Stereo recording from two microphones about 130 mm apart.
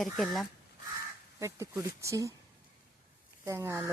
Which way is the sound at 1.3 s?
20° right (ahead or behind).